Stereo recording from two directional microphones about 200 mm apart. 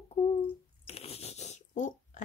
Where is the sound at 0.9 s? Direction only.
30° left (ahead or behind).